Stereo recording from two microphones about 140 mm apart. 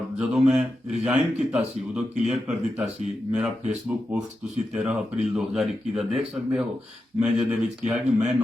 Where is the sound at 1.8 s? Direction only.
55° right (ahead or behind).